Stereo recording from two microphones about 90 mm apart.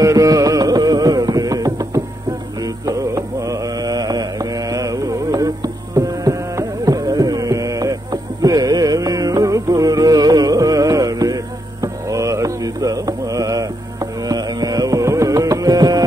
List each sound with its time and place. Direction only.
0.0 s music: 35° right (ahead or behind)
2.9 s carnatic music: 40° right (ahead or behind)
11.8 s mantra: 35° right (ahead or behind)
14.3 s music: 45° right (ahead or behind)